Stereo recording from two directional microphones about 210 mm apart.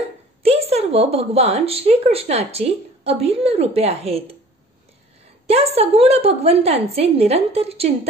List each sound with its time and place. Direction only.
0.4 s a woman's voice: 30° right (ahead or behind)
5.5 s a woman's voice: 30° right (ahead or behind)